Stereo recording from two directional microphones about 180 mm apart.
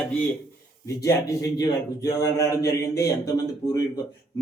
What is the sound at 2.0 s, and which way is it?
Speech, 20° left (ahead or behind).